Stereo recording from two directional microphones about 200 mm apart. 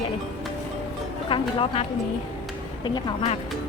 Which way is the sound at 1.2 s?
25° left (ahead or behind).